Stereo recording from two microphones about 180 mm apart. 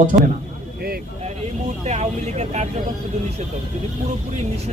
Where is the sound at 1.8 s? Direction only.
40° right (ahead or behind).